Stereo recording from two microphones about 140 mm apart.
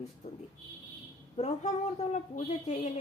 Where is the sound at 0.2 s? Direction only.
60° left (ahead or behind).